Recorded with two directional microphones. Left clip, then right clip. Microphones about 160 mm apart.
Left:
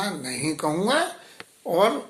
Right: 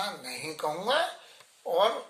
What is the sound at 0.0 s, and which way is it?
Speech, 15° left (ahead or behind).